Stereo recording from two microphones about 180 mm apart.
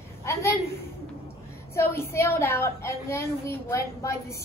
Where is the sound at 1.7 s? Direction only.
15° left (ahead or behind).